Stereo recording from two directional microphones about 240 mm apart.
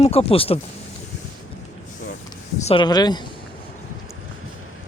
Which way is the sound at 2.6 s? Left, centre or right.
Centre.